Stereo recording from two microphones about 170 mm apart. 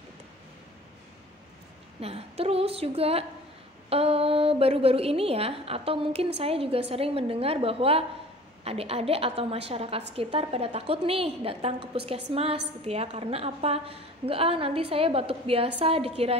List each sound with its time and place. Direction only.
2.0 s a woman's voice: 35° right (ahead or behind)